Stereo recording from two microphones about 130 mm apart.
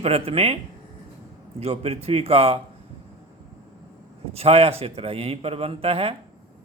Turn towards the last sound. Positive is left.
turn(degrees=-45)  # may be behind; listen again after turning